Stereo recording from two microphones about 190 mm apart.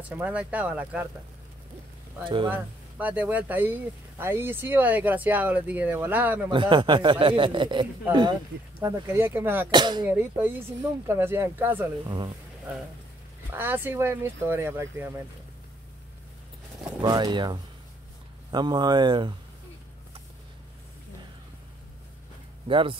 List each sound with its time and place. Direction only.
0.1 s speech: 10° right (ahead or behind)
2.2 s a man's voice: 25° right (ahead or behind)
2.5 s speech: 10° right (ahead or behind)
6.5 s a man's voice: 25° right (ahead or behind)
9.7 s a man's voice: 25° right (ahead or behind)
10.0 s speech: 10° right (ahead or behind)
13.5 s speech: 10° right (ahead or behind)
17.0 s a man's voice: 25° right (ahead or behind)
22.7 s a man's voice: 25° right (ahead or behind)